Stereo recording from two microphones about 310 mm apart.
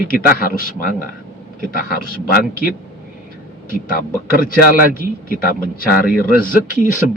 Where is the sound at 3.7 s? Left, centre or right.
Left.